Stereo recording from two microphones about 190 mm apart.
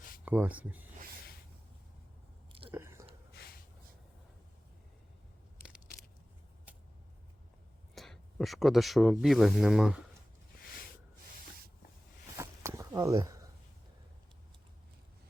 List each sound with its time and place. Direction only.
0.3 s speech: 10° right (ahead or behind)
2.5 s chewing: 30° right (ahead or behind)
2.7 s chewing: 15° right (ahead or behind)
7.9 s speech: centre (ahead or behind)
12.4 s a sound: 15° right (ahead or behind)